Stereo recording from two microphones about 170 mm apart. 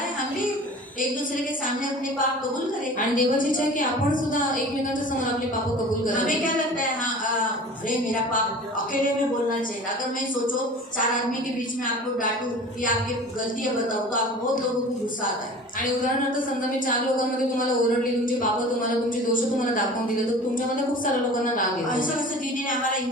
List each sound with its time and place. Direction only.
3.2 s a woman's voice: 50° left (ahead or behind)
6.1 s a woman's voice: 50° left (ahead or behind)
16.9 s a woman's voice: 50° left (ahead or behind)
19.3 s a woman's voice: 50° left (ahead or behind)